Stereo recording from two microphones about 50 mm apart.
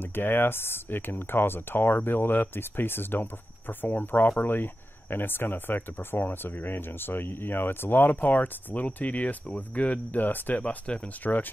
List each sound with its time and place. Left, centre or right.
0.1 s speech: left
10.6 s speech: left